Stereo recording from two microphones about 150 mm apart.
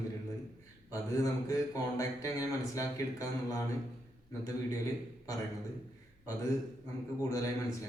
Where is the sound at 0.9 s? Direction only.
20° left (ahead or behind).